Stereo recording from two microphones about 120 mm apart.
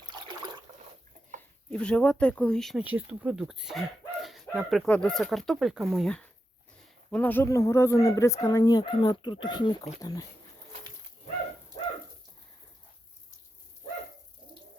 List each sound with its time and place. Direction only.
0.1 s a sound: 40° right (ahead or behind)
1.4 s speech: 10° left (ahead or behind)
2.8 s speech: 10° right (ahead or behind); by 9.7 s 40° left (ahead or behind)
10.0 s speech: 30° left (ahead or behind)